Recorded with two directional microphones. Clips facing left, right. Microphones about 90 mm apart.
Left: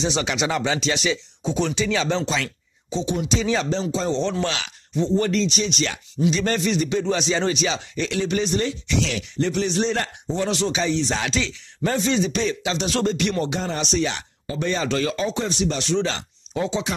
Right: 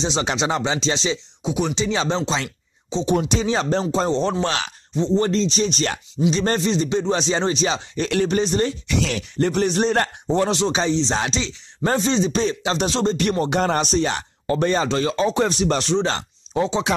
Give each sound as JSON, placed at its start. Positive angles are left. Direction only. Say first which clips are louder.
{"t": 0.0, "sound": "speech", "louder": "right 1 dB", "side_deg": -30}
{"t": 1.4, "sound": "speech", "louder": "right 1 dB", "side_deg": -15}
{"t": 1.9, "sound": "speech", "louder": "right 1 dB", "side_deg": -25}
{"t": 3.1, "sound": "speech", "louder": "right 3 dB", "side_deg": -50}
{"t": 4.9, "sound": "speech", "louder": "right 1 dB", "side_deg": -25}
{"t": 10.5, "sound": "speech", "louder": "right 2 dB", "side_deg": -30}
{"t": 11.8, "sound": "speech", "louder": "right 2 dB", "side_deg": -35}
{"t": 12.9, "sound": "speech", "louder": "right 1 dB", "side_deg": -30}
{"t": 13.2, "sound": "speech", "louder": "right 4 dB", "side_deg": -40}
{"t": 14.9, "sound": "speech", "louder": "right 3 dB", "side_deg": -30}
{"t": 15.3, "sound": "speech", "louder": "right 4 dB", "side_deg": -50}